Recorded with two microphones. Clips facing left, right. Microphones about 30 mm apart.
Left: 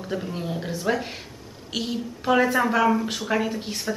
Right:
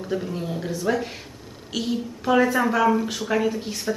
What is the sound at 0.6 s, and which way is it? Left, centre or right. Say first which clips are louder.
A woman's voice: right 1 dB; centre.